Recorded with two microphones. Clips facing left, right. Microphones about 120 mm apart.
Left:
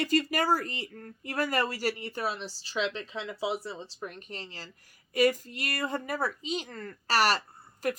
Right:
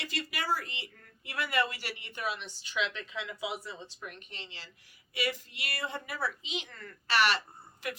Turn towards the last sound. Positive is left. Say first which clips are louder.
# left 8 dB
turn(degrees=40)  # may be behind; listen again after turning